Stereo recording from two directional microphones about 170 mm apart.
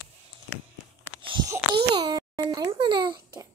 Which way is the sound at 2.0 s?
25° right (ahead or behind).